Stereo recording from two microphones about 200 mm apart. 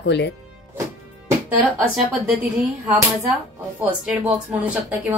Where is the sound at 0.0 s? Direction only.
60° left (ahead or behind).